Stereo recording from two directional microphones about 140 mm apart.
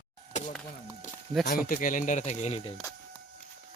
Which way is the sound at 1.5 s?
80° left.